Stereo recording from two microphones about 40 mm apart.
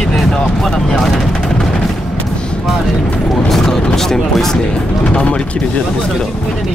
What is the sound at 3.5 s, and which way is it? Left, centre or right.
Vehicle, centre.